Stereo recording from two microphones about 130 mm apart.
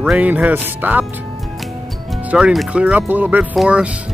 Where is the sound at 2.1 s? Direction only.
5° right (ahead or behind).